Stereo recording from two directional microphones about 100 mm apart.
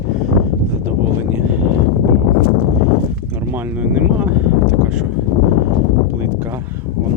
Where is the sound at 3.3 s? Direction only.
20° right (ahead or behind).